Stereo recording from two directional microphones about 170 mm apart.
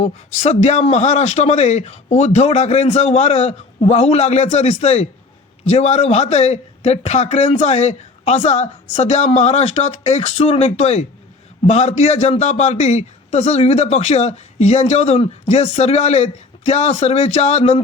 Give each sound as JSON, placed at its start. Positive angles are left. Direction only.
{"t": 0.0, "sound": "a man's voice", "side_deg": 40}